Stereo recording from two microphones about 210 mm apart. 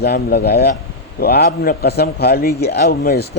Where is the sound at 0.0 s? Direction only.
50° left (ahead or behind).